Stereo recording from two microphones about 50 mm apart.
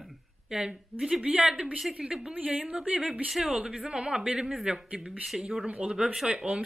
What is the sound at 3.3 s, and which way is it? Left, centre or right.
Speech, centre.